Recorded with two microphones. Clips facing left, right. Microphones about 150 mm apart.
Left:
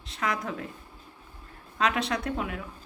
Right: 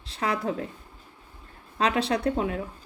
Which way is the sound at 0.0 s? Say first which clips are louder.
Right 3 dB; 30° right (ahead or behind).